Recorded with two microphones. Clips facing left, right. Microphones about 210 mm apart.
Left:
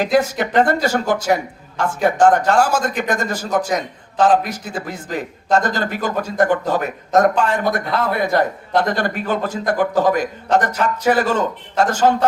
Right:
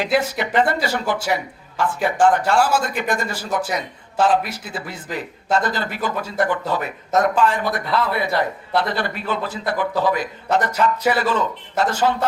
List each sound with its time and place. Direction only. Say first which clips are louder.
0.0 s a man's voice: left 4 dB; 45° left (ahead or behind)